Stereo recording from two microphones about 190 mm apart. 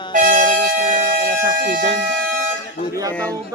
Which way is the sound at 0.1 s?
45° right (ahead or behind).